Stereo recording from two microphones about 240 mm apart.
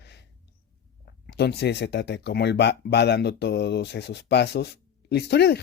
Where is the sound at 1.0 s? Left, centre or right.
Left.